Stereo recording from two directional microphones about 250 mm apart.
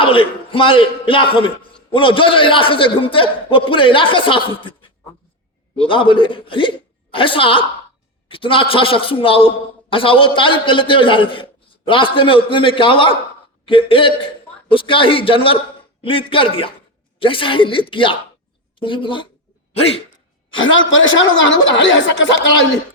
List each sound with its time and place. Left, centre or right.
0.0 s a man's voice: left
20.6 s a woman's voice: left